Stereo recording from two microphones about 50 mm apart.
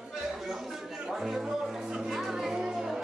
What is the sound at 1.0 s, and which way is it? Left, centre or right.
Music, centre.